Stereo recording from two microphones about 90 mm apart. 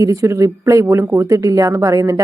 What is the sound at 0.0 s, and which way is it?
A woman's voice, 35° right (ahead or behind).